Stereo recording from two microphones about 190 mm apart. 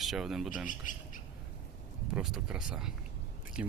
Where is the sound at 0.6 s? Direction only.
45° left (ahead or behind).